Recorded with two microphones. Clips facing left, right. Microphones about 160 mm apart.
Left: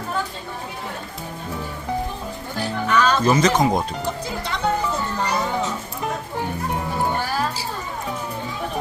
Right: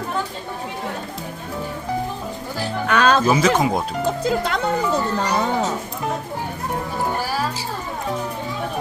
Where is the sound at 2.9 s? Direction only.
60° right (ahead or behind).